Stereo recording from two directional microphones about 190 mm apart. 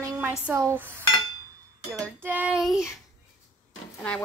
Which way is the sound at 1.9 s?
10° right (ahead or behind).